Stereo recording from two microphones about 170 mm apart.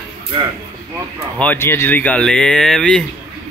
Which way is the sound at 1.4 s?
10° left (ahead or behind).